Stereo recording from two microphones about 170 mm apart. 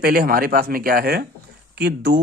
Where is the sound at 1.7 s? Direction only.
75° right (ahead or behind).